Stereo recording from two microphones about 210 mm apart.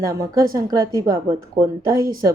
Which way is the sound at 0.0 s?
15° right (ahead or behind).